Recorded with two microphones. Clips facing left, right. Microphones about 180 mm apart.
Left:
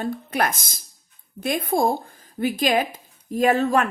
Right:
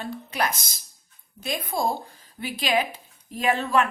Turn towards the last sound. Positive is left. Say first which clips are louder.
# left 4 dB
turn(degrees=40)  # may be behind; listen again after turning